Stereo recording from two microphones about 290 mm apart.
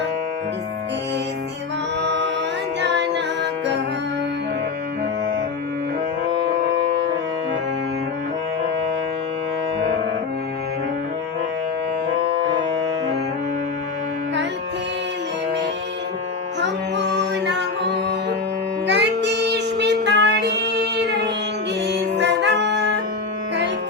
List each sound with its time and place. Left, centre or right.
2.0 s music: right
16.6 s music: right